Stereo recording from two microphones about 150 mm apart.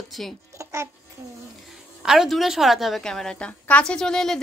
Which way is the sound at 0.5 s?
20° right (ahead or behind).